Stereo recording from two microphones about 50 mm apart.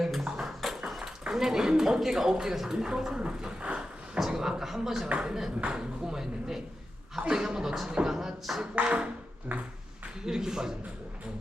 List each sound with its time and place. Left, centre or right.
0.0 s a sound: centre
1.3 s speech: centre
4.2 s speech: centre
5.0 s a sound: right
5.7 s speech: centre
8.1 s speech: centre
8.7 s a sound: right
9.5 s speech: right
10.2 s speech: centre